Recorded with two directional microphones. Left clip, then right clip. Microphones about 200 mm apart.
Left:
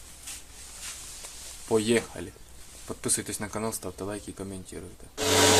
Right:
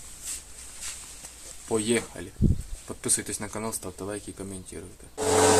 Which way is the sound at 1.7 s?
10° left (ahead or behind).